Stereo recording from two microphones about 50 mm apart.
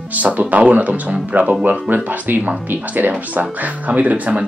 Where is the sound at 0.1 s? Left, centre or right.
Right.